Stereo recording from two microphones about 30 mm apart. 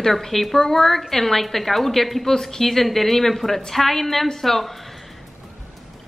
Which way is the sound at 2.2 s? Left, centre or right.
Centre.